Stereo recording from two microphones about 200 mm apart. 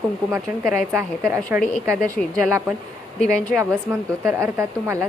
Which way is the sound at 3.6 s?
15° right (ahead or behind).